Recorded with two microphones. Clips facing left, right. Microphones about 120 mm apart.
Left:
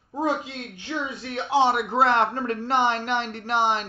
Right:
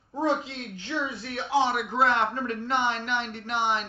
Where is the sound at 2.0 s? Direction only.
60° left (ahead or behind).